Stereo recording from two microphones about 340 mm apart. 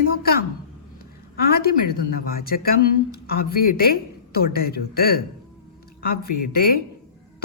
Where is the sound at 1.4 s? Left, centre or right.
Left.